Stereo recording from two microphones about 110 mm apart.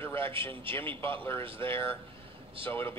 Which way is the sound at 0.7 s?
20° left (ahead or behind).